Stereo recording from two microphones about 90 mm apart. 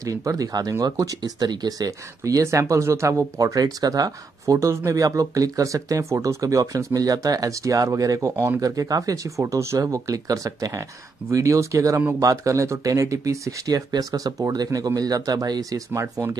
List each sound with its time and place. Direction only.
0.0 s speech: 40° right (ahead or behind)